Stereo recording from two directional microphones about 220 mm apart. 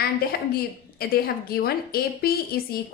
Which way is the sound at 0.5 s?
45° left (ahead or behind).